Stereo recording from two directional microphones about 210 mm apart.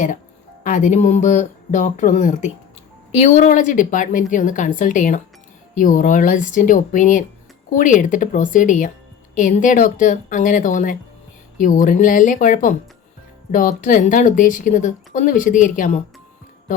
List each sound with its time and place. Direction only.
0.6 s a woman's voice: 35° left (ahead or behind)